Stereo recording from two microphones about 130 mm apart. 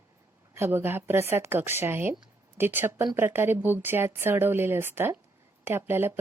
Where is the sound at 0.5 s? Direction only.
15° right (ahead or behind).